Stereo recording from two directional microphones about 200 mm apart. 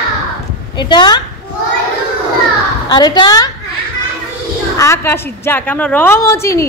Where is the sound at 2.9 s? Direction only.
20° left (ahead or behind).